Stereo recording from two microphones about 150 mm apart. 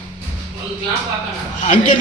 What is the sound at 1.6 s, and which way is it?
Speech, 55° left (ahead or behind).